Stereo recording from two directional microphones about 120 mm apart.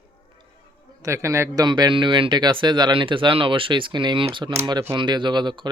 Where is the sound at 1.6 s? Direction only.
40° right (ahead or behind).